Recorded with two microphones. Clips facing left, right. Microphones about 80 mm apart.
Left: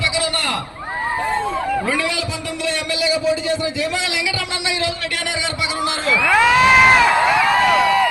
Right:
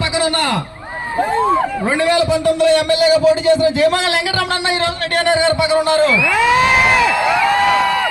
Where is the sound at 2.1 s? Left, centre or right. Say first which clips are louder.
Right 12 dB; right.